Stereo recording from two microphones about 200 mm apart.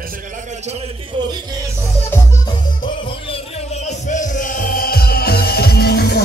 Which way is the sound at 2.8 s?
30° left (ahead or behind).